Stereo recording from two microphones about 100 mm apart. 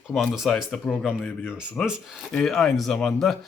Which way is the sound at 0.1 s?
Centre (ahead or behind).